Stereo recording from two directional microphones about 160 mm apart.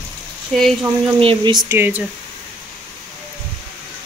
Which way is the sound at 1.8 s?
10° right (ahead or behind).